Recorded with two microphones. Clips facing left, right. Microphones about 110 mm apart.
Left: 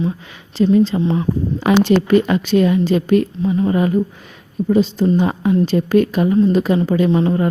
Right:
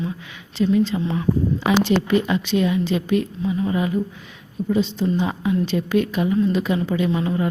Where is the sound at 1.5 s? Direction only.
50° left (ahead or behind).